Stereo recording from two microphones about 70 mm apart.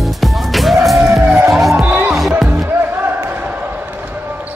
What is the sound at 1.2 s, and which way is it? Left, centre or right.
Music, right.